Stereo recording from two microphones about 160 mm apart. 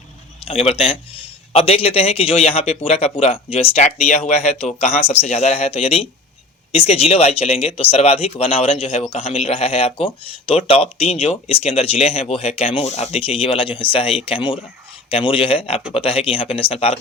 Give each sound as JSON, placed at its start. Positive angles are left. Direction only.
{"t": 0.4, "sound": "a man's voice", "side_deg": 40}